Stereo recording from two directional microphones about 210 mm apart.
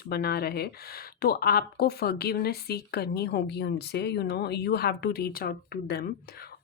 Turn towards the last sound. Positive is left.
turn(degrees=45)  # may be behind; listen again after turning